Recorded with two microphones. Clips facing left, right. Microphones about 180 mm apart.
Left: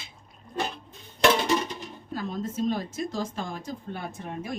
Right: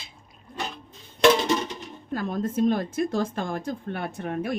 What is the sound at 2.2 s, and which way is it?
A woman's voice, 55° right (ahead or behind).